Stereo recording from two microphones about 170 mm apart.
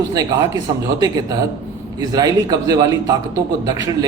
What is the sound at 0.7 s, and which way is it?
Speech, 25° right (ahead or behind).